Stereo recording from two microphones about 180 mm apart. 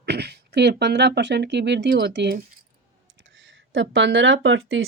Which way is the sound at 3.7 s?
85° right.